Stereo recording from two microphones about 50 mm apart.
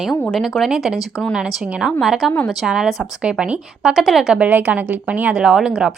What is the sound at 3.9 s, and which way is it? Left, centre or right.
Speech, centre.